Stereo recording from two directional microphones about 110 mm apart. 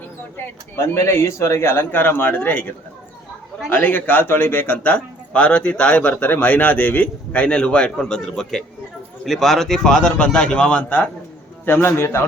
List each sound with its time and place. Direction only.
0.3 s a man's voice: 25° left (ahead or behind)